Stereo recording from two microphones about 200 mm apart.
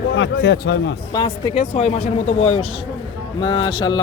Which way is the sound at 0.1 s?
65° left (ahead or behind).